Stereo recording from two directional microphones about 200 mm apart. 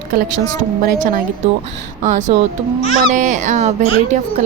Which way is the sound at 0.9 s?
45° right (ahead or behind).